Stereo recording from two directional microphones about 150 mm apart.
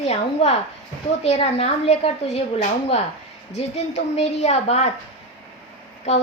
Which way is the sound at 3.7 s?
45° left (ahead or behind).